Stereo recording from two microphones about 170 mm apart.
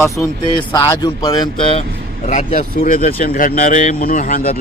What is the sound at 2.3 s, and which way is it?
Speech, 50° left (ahead or behind).